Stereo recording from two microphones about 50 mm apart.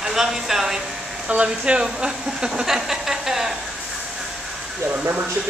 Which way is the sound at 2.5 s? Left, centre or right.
Centre.